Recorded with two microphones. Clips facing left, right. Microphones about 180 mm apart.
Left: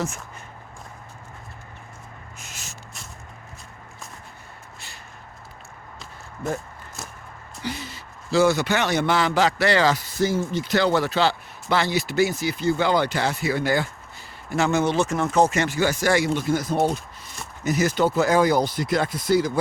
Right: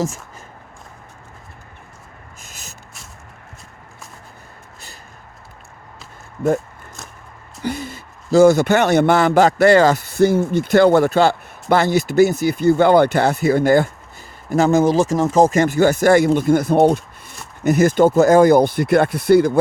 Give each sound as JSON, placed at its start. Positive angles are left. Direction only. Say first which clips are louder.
{"t": 7.6, "sound": "speech", "louder": "right 7 dB", "side_deg": -50}